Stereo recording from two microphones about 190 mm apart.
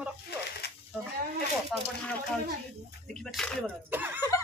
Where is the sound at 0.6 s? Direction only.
60° left (ahead or behind).